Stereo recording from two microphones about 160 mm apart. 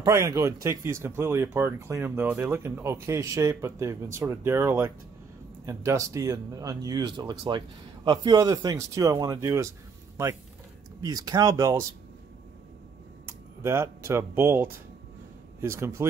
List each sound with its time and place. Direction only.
0.0 s speech: 25° right (ahead or behind)
11.0 s speech: 25° right (ahead or behind)
13.3 s speech: 15° right (ahead or behind)